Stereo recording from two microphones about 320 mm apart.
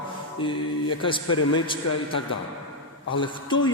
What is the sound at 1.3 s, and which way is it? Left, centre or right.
Speech, left.